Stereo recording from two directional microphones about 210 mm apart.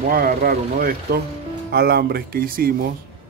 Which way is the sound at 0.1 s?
45° right (ahead or behind).